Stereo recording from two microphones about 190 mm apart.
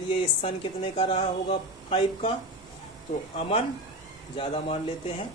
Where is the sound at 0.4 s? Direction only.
30° left (ahead or behind).